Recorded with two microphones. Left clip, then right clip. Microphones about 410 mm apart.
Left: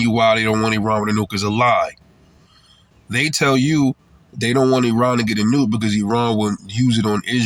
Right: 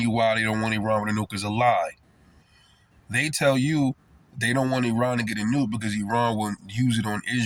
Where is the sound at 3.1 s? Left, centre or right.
Right.